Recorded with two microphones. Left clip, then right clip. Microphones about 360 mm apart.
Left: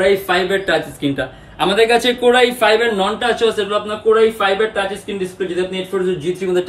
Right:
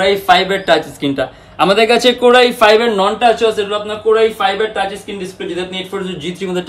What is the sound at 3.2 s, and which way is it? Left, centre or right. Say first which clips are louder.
A man's voice: right 4 dB; centre.